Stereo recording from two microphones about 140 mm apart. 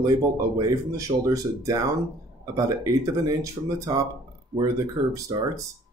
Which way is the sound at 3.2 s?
25° right (ahead or behind).